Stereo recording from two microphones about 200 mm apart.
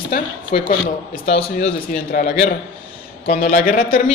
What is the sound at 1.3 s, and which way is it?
Speech, 30° left (ahead or behind).